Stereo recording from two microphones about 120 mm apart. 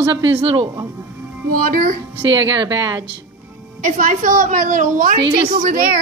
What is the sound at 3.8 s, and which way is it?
A woman's voice, 90° right.